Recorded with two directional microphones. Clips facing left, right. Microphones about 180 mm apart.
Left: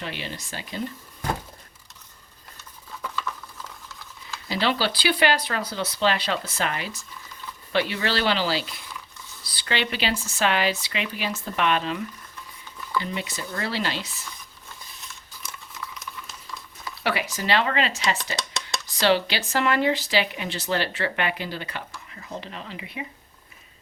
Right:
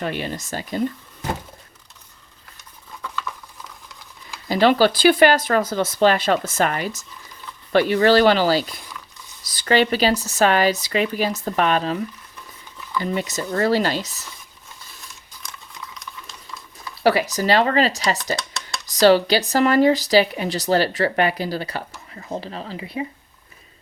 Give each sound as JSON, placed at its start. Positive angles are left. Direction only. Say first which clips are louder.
{"t": 0.0, "sound": "speech", "louder": "right 8 dB", "side_deg": -50}
{"t": 4.4, "sound": "speech", "louder": "right 9 dB", "side_deg": -45}
{"t": 15.4, "sound": "typing", "louder": "right 1 dB", "side_deg": 5}
{"t": 17.0, "sound": "speech", "louder": "right 9 dB", "side_deg": -40}
{"t": 18.3, "sound": "a sound", "louder": "even", "side_deg": 20}
{"t": 18.9, "sound": "speech", "louder": "right 8 dB", "side_deg": -40}